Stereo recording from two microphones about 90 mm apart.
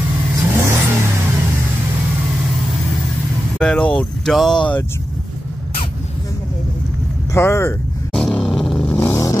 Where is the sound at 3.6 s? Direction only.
5° left (ahead or behind).